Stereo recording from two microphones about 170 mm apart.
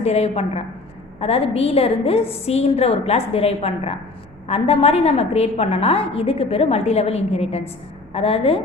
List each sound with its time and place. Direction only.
0.0 s a woman's voice: 40° left (ahead or behind)